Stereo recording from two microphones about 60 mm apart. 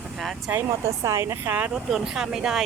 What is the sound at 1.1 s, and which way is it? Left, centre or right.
Speech, right.